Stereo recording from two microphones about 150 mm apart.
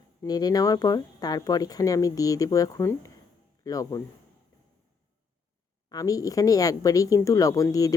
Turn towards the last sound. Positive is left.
turn(degrees=25)  # may be behind; listen again after turning